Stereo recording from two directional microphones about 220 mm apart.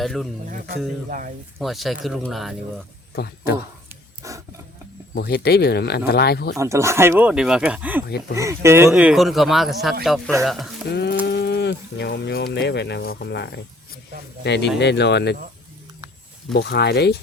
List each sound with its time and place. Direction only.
0.0 s speech: centre (ahead or behind)
1.5 s speech: centre (ahead or behind)
3.2 s speech: 45° left (ahead or behind)
3.8 s filing: 15° right (ahead or behind)
5.1 s speech: 45° left (ahead or behind)
6.6 s speech: 15° right (ahead or behind)
10.8 s speech: 50° left (ahead or behind)
16.5 s speech: 50° left (ahead or behind)